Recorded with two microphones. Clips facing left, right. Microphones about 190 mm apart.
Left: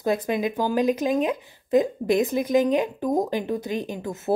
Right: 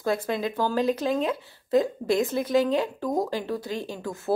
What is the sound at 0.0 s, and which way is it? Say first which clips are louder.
Speech: left 3 dB; 15° left (ahead or behind).